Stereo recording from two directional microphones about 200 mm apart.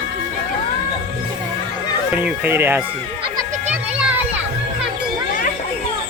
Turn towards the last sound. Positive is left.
turn(degrees=-5)  # may be behind; listen again after turning